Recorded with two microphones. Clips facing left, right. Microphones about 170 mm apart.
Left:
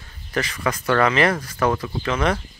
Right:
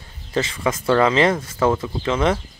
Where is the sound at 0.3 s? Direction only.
25° right (ahead or behind).